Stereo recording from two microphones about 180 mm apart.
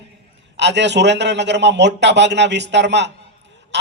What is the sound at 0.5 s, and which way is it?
A man's voice, 75° right (ahead or behind).